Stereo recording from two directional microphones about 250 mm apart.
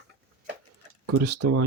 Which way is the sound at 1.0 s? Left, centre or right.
Right.